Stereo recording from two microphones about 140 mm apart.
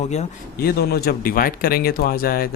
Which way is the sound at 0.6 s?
90° left.